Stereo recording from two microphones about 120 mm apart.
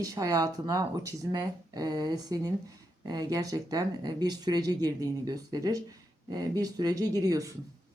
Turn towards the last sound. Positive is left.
turn(degrees=-30)  # may be behind; listen again after turning